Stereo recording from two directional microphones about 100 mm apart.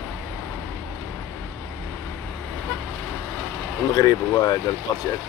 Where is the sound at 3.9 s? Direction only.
35° left (ahead or behind).